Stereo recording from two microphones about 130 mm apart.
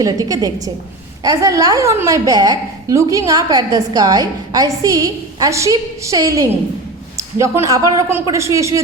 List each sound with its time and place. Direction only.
0.0 s a woman's voice: 25° right (ahead or behind)